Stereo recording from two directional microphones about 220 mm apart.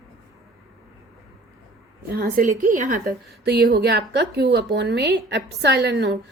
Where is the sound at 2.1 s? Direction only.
40° right (ahead or behind).